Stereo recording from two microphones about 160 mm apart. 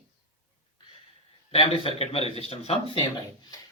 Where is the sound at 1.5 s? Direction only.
35° left (ahead or behind).